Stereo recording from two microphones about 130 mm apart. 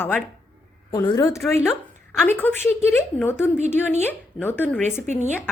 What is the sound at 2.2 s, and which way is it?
A woman's voice, 15° left (ahead or behind).